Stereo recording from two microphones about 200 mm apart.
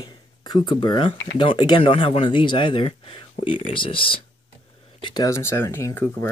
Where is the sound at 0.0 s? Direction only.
20° left (ahead or behind).